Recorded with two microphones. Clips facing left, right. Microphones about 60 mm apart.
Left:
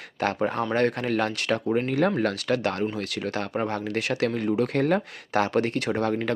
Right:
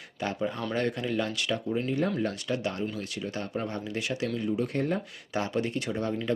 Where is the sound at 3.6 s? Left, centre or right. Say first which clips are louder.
Left 5 dB; left.